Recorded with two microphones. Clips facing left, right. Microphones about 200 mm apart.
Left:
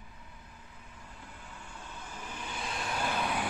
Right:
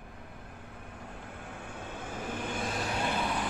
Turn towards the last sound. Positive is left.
turn(degrees=0)  # may be behind; listen again after turning